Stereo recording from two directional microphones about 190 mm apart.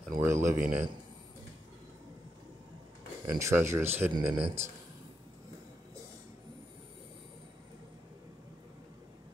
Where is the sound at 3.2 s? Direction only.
15° right (ahead or behind).